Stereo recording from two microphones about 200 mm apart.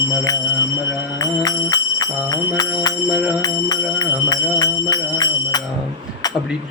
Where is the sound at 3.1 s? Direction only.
5° right (ahead or behind).